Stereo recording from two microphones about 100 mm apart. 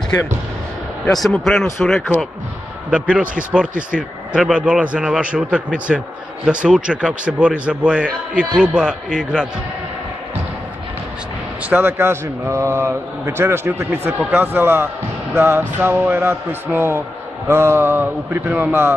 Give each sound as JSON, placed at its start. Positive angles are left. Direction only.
{"t": 1.4, "sound": "speech", "side_deg": 0}
{"t": 2.9, "sound": "a man's voice", "side_deg": -10}
{"t": 11.7, "sound": "a man's voice", "side_deg": -25}